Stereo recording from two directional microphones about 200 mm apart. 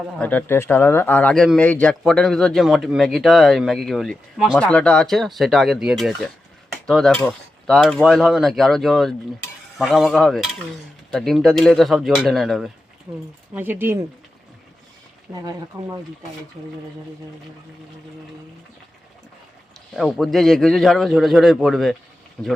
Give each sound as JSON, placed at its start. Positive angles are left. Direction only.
{"t": 0.2, "sound": "speech", "side_deg": 10}
{"t": 15.4, "sound": "speech", "side_deg": -20}
{"t": 20.0, "sound": "speech", "side_deg": 0}